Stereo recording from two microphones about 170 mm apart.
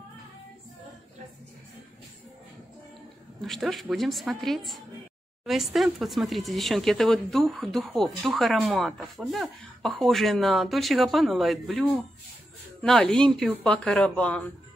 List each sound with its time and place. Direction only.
3.3 s speech: centre (ahead or behind)
12.8 s speech: 5° left (ahead or behind)